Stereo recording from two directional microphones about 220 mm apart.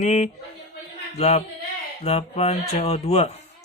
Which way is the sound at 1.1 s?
30° left (ahead or behind).